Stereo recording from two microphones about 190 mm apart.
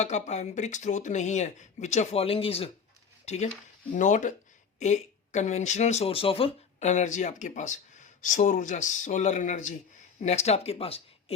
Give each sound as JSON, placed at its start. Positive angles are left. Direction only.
{"t": 0.0, "sound": "speech", "side_deg": 35}